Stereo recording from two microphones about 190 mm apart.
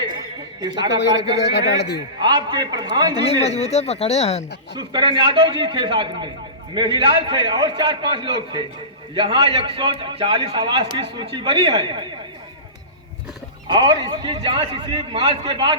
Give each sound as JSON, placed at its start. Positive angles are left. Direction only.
{"t": 0.8, "sound": "a man's voice", "side_deg": 65}
{"t": 2.2, "sound": "a man's voice", "side_deg": -20}
{"t": 3.2, "sound": "speech", "side_deg": 35}
{"t": 4.8, "sound": "a man's voice", "side_deg": -25}
{"t": 13.7, "sound": "a man's voice", "side_deg": -25}